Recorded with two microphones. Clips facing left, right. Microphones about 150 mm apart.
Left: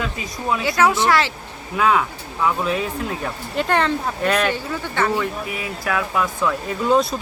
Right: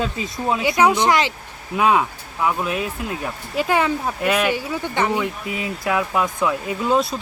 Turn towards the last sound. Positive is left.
turn(degrees=0)  # may be behind; listen again after turning